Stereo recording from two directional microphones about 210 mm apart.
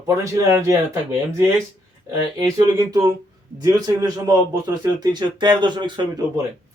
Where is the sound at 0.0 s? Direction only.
15° right (ahead or behind).